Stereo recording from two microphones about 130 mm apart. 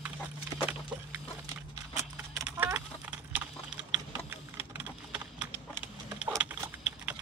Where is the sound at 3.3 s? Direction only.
10° right (ahead or behind).